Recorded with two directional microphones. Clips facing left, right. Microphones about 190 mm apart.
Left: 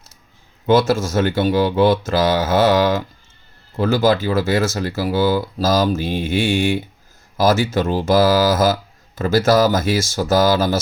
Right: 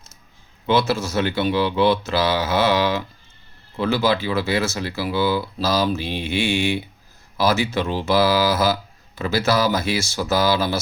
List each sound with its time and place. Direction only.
0.7 s speech: 45° left (ahead or behind)